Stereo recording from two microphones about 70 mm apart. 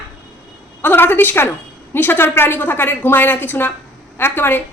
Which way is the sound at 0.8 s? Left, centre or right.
Left.